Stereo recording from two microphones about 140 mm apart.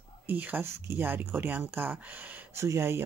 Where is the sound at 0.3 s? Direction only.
15° right (ahead or behind).